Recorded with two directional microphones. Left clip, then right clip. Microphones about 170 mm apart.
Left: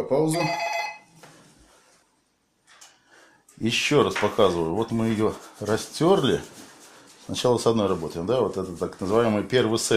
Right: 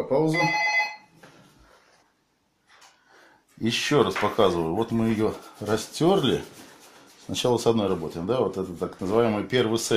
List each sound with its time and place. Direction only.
0.1 s speech: 10° left (ahead or behind)
3.6 s speech: 30° left (ahead or behind)